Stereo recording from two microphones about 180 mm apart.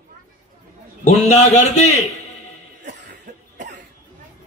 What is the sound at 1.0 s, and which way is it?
A man's voice, 40° left (ahead or behind).